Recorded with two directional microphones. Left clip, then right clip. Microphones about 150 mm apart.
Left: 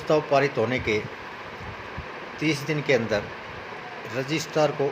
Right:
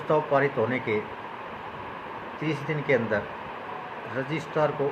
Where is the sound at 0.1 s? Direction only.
50° left (ahead or behind).